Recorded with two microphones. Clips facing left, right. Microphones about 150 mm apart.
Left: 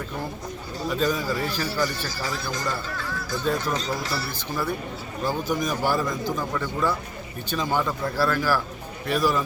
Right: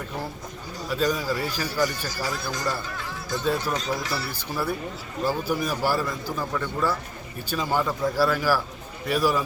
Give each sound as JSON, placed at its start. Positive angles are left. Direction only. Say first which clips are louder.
{"t": 0.9, "sound": "speech", "louder": "even", "side_deg": -5}
{"t": 3.2, "sound": "a sound", "louder": "right 2 dB", "side_deg": -20}
{"t": 3.4, "sound": "speech", "louder": "even", "side_deg": -10}